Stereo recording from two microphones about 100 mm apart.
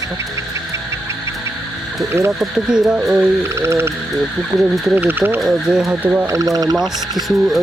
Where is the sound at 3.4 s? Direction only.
30° right (ahead or behind).